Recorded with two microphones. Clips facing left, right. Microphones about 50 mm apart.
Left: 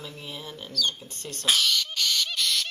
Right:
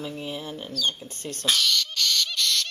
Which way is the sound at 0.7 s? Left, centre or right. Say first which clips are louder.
Right 1 dB; right.